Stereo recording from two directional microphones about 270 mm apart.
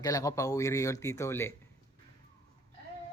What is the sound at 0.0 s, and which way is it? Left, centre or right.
Speech, centre.